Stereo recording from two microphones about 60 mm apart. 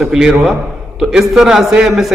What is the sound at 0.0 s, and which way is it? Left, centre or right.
A man's voice, centre.